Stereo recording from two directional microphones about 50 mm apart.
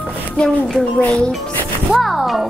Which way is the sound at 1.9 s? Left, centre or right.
Centre.